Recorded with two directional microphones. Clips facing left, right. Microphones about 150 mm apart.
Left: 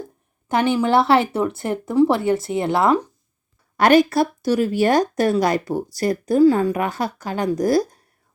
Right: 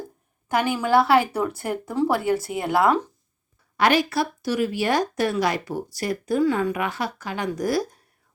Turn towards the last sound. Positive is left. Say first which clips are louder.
# left 6 dB
turn(degrees=40)  # may be behind; listen again after turning